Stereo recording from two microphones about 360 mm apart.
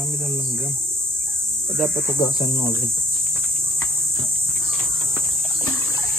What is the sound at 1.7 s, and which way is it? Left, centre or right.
Cricket, centre.